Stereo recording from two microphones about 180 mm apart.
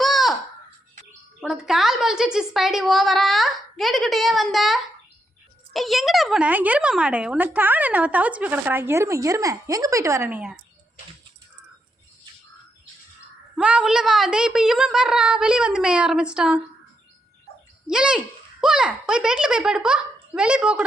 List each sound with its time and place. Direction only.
0.0 s a sound: centre (ahead or behind)
1.4 s a woman's voice: 5° right (ahead or behind)
13.6 s a woman's voice: 5° right (ahead or behind)
17.8 s a woman's voice: 5° right (ahead or behind)